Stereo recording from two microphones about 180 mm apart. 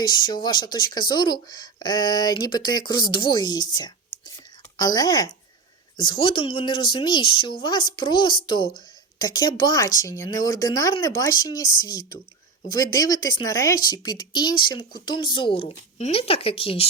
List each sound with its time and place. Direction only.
0.0 s speech: 25° left (ahead or behind)